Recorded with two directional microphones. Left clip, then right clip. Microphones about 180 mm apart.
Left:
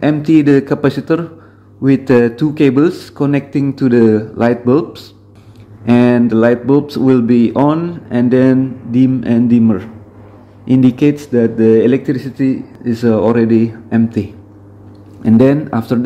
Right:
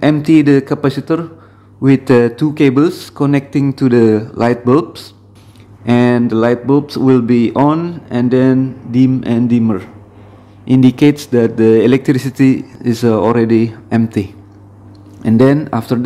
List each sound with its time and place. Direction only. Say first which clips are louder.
0.0 s a man's voice: right 1 dB; 15° right (ahead or behind)